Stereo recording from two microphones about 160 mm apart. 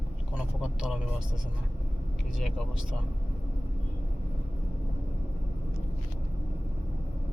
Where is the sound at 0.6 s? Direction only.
5° right (ahead or behind).